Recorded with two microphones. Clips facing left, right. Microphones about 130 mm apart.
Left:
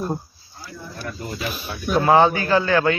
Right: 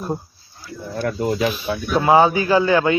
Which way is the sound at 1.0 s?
90° right.